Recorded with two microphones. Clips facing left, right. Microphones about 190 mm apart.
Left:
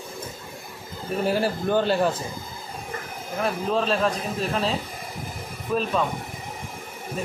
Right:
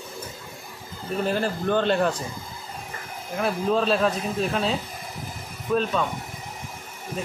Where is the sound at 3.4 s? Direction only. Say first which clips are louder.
Right 1 dB; centre (ahead or behind).